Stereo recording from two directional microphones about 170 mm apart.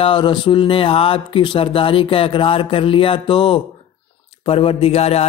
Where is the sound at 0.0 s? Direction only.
30° left (ahead or behind).